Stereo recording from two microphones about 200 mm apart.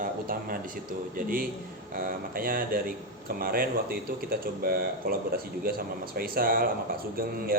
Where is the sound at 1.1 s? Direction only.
45° right (ahead or behind).